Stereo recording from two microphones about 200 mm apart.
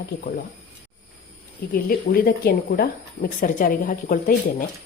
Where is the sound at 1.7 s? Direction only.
45° left (ahead or behind).